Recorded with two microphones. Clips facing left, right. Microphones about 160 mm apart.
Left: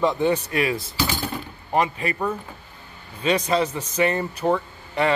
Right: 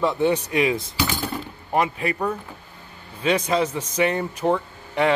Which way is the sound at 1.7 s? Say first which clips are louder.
Even; 10° right (ahead or behind).